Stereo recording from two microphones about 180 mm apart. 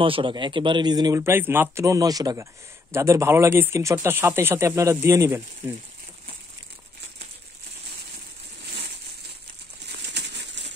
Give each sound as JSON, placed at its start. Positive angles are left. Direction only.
{"t": 0.0, "sound": "speech", "side_deg": -30}
{"t": 9.8, "sound": "crumpling", "side_deg": -70}